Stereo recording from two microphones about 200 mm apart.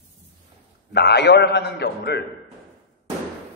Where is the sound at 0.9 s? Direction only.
55° left (ahead or behind).